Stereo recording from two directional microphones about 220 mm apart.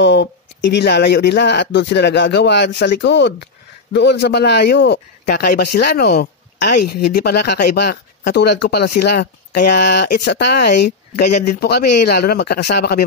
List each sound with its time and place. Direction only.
0.0 s a man's voice: 50° left (ahead or behind)